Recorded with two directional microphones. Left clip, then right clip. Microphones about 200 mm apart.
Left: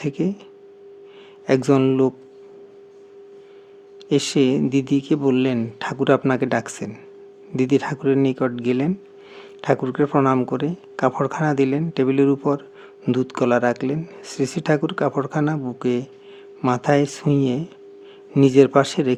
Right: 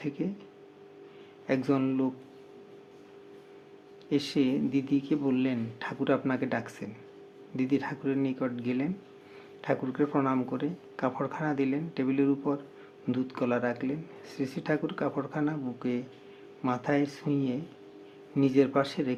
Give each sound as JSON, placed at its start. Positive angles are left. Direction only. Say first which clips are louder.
{"t": 0.0, "sound": "speech", "louder": "left 10 dB", "side_deg": 55}
{"t": 1.5, "sound": "speech", "louder": "left 11 dB", "side_deg": 55}
{"t": 4.1, "sound": "speech", "louder": "left 10 dB", "side_deg": 55}